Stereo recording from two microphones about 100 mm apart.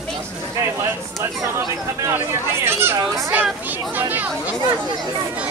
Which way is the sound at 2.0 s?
25° right (ahead or behind).